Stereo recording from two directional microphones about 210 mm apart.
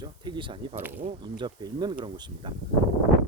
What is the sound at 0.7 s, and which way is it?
Speech, 10° right (ahead or behind).